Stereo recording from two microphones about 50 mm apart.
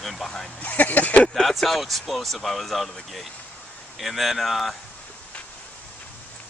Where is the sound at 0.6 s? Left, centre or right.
Left.